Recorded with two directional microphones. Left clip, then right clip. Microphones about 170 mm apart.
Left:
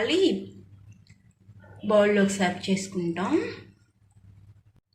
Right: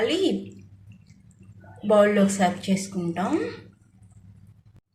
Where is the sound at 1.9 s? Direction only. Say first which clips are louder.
Right 2 dB; 15° right (ahead or behind).